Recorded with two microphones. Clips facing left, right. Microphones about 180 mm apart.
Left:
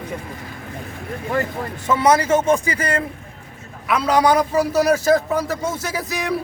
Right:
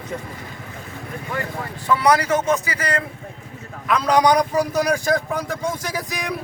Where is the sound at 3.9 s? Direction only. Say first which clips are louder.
Even; 5° left (ahead or behind).